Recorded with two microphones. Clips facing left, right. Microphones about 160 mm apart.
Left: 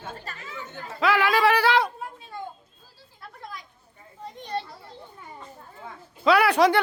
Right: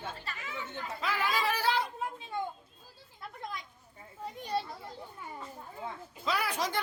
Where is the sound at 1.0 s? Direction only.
75° left (ahead or behind).